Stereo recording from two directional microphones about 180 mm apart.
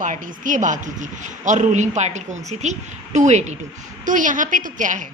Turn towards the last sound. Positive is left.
turn(degrees=-45)  # may be behind; listen again after turning